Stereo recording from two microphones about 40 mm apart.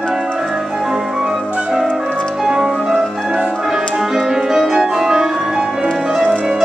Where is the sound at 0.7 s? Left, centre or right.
Centre.